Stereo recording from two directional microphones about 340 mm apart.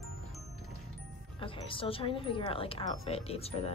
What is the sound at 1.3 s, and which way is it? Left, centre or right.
Speech, centre.